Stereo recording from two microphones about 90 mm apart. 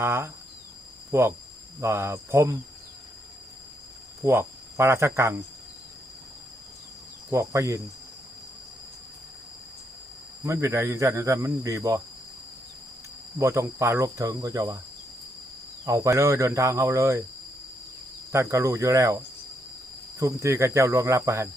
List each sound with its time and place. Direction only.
0.0 s cricket: 30° right (ahead or behind)
4.2 s speech: 30° right (ahead or behind)
7.3 s speech: 30° right (ahead or behind)
10.4 s speech: 30° right (ahead or behind)
13.4 s speech: 35° right (ahead or behind)
15.9 s speech: 35° right (ahead or behind)
18.3 s speech: 35° right (ahead or behind)